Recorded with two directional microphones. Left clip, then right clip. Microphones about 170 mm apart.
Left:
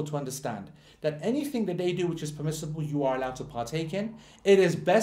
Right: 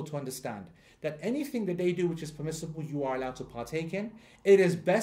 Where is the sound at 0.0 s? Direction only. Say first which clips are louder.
Left 4 dB; 40° right (ahead or behind).